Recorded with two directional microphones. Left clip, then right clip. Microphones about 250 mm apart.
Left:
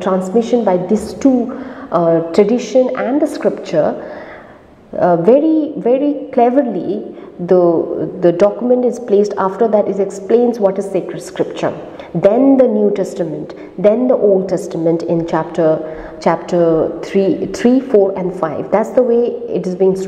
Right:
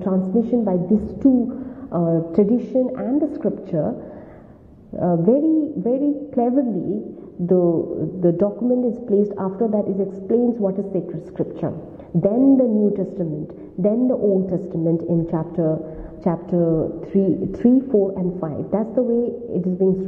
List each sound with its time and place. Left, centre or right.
0.0 s a woman's voice: centre
7.4 s speech: left
8.2 s a woman's voice: centre
8.5 s speech: centre
8.8 s a woman's voice: centre
9.3 s a woman's voice: centre
13.7 s a woman's voice: centre
14.7 s a woman's voice: centre